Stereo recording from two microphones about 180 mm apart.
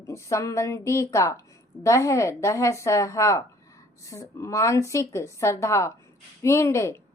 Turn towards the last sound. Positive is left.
turn(degrees=15)  # may be behind; listen again after turning